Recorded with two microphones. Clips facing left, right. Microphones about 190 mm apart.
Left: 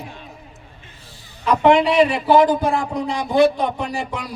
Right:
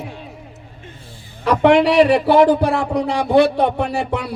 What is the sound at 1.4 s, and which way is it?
A man's voice, 70° right (ahead or behind).